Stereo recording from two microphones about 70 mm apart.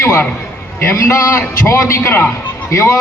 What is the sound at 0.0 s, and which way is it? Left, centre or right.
Speech, left.